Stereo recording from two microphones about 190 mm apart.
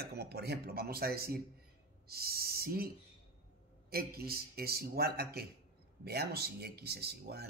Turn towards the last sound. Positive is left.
turn(degrees=-60)  # may be behind; listen again after turning